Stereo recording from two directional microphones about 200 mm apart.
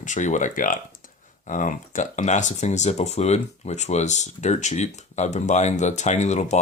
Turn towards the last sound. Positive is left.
turn(degrees=35)  # may be behind; listen again after turning